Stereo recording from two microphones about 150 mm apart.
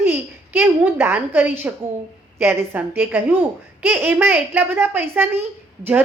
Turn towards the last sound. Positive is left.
turn(degrees=-15)  # may be behind; listen again after turning